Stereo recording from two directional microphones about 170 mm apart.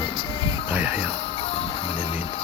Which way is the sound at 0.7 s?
10° right (ahead or behind).